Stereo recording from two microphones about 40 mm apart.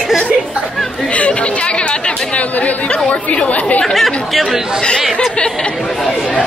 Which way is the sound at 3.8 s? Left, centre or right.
Centre.